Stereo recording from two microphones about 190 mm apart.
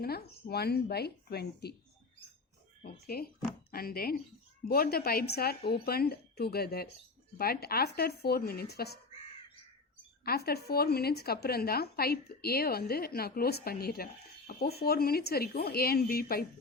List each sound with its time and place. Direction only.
0.0 s speech: 55° left (ahead or behind)
2.8 s a woman's voice: 55° left (ahead or behind)
10.2 s a woman's voice: 55° left (ahead or behind)